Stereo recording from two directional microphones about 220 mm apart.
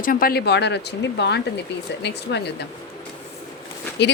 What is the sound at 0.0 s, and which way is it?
A woman's voice, 40° left (ahead or behind).